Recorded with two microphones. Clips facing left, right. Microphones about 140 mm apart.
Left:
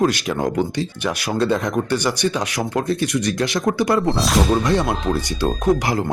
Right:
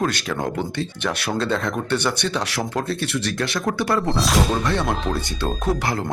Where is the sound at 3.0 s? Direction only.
70° right (ahead or behind).